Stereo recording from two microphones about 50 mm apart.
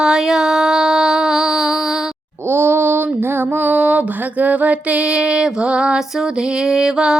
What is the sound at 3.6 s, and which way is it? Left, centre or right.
Music, right.